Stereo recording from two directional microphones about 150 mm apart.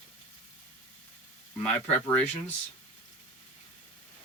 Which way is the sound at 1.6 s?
10° left (ahead or behind).